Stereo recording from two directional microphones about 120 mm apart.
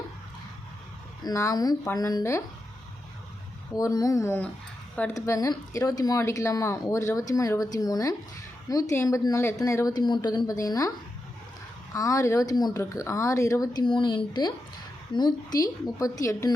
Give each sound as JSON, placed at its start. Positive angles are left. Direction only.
{"t": 1.2, "sound": "speech", "side_deg": 25}
{"t": 3.8, "sound": "a woman's voice", "side_deg": 30}
{"t": 11.9, "sound": "speech", "side_deg": 25}